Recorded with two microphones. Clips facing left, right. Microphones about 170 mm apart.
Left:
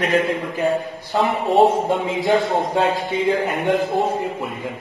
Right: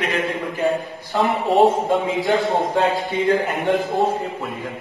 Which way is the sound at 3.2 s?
20° left (ahead or behind).